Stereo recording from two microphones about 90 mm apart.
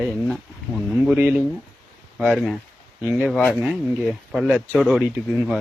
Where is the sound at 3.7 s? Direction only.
Centre (ahead or behind).